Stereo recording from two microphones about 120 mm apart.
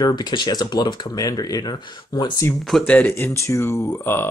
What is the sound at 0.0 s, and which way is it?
Speech, 35° left (ahead or behind).